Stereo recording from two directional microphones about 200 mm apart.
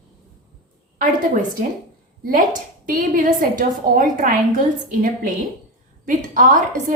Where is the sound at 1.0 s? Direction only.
40° right (ahead or behind).